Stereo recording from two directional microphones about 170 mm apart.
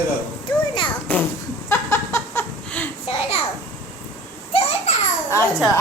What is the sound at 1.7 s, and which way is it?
Laughter, 15° left (ahead or behind).